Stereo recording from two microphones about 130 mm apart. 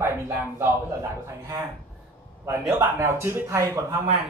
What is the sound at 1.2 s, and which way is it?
Speech, 25° right (ahead or behind).